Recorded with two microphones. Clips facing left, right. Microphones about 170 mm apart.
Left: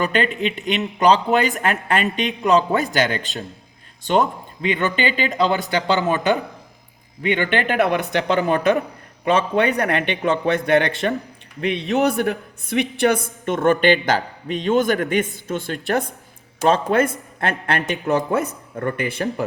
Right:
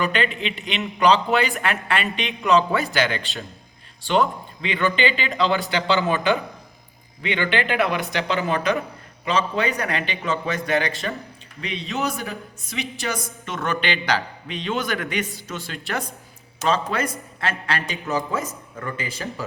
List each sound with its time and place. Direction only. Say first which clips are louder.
0.1 s a woman's voice: left 4 dB; 45° left (ahead or behind); by 19.5 s 60° left (ahead or behind)